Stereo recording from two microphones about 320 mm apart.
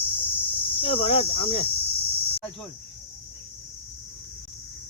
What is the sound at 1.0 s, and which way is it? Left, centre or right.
Speech, centre.